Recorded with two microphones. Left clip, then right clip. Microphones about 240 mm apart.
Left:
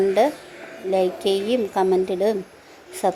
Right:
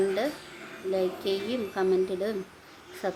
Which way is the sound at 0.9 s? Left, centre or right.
Centre.